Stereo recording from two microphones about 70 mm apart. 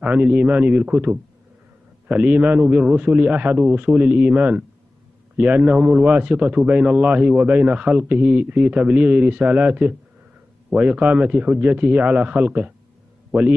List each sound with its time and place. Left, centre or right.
0.0 s a man's voice: right